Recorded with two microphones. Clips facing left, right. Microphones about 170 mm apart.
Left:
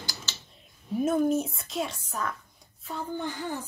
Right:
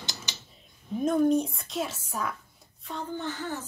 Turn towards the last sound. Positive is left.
turn(degrees=15)  # may be behind; listen again after turning